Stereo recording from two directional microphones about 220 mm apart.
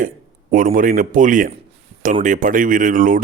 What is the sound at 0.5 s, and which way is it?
Speech, 40° right (ahead or behind).